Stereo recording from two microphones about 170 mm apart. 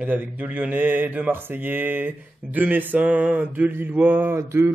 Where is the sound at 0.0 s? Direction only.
10° right (ahead or behind).